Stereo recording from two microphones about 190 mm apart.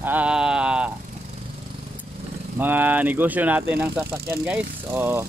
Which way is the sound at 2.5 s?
10° right (ahead or behind).